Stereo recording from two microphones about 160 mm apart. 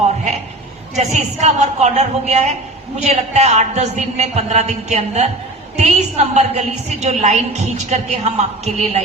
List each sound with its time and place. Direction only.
0.9 s a woman's voice: 45° right (ahead or behind)